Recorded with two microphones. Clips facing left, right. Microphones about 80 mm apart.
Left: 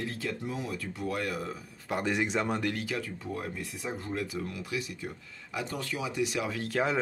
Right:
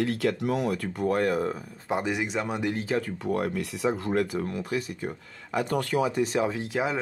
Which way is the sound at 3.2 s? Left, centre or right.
Right.